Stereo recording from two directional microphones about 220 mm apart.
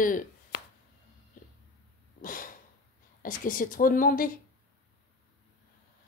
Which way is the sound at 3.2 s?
40° left (ahead or behind).